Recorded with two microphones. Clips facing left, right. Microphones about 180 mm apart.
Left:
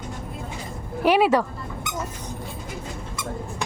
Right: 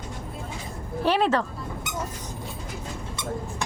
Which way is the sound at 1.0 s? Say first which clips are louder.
Left 4 dB; 10° left (ahead or behind).